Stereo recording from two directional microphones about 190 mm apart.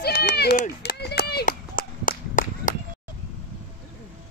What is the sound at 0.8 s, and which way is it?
Whip, 60° left (ahead or behind).